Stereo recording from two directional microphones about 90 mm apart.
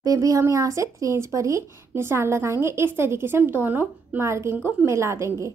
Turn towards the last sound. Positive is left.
turn(degrees=-35)  # may be behind; listen again after turning